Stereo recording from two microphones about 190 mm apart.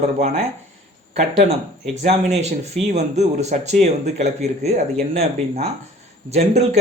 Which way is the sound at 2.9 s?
35° right (ahead or behind).